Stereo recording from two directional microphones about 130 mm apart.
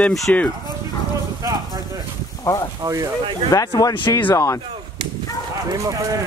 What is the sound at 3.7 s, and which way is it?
Speech, 35° left (ahead or behind).